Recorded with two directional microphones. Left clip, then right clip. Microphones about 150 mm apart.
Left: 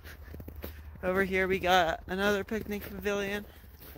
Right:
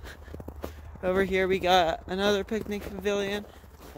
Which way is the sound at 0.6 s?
10° right (ahead or behind).